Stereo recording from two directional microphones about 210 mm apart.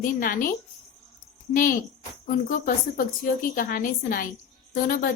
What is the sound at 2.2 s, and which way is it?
A woman's voice, 40° left (ahead or behind).